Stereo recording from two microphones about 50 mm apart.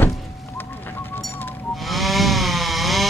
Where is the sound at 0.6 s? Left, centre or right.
Left.